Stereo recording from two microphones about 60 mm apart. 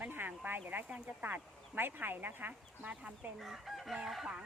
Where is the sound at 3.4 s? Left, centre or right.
Centre.